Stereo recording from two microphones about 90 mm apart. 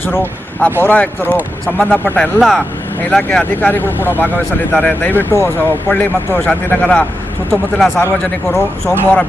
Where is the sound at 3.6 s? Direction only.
20° left (ahead or behind).